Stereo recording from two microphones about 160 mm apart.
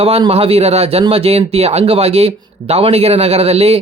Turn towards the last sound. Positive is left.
turn(degrees=-40)  # may be behind; listen again after turning